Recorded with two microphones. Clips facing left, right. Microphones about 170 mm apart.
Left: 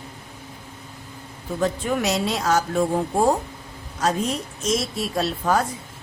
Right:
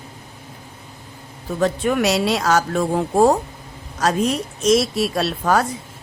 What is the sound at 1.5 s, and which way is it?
Speech, 75° right (ahead or behind).